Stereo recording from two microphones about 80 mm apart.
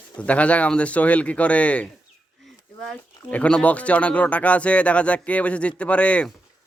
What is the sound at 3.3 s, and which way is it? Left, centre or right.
Speech, centre.